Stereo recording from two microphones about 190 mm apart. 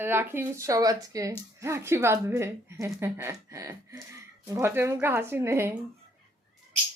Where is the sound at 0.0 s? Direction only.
10° right (ahead or behind).